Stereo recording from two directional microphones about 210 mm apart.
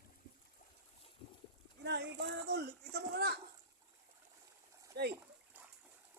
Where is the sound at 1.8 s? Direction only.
55° right (ahead or behind).